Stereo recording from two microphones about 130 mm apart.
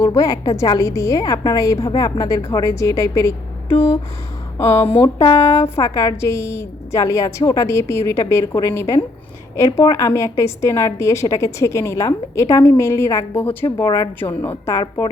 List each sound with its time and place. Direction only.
0.0 s a woman's voice: 25° left (ahead or behind)
14.8 s a woman's voice: 25° left (ahead or behind)